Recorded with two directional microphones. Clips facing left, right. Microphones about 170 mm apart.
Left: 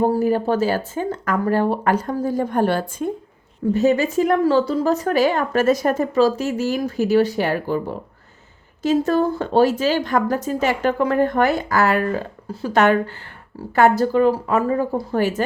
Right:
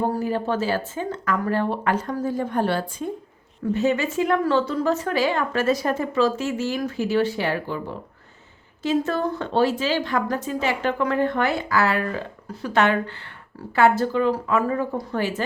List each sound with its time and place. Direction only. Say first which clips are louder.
0.0 s speech: left 6 dB; 40° left (ahead or behind)
2.0 s a woman's voice: left 3 dB; 25° left (ahead or behind)
2.3 s a woman's voice: left 4 dB; 45° left (ahead or behind)
12.5 s speech: left 3 dB; 30° left (ahead or behind)
12.8 s speech: left 4 dB; 40° left (ahead or behind)